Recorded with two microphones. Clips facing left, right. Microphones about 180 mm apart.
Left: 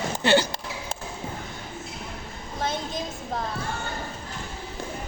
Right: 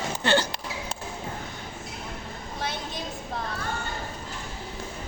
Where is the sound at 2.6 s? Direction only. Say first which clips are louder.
Left 5 dB; 45° left (ahead or behind).